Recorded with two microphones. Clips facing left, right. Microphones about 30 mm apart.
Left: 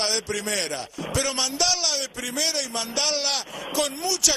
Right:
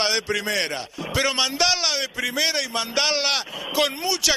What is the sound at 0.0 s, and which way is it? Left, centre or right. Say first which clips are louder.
A man's voice: right 3 dB; right.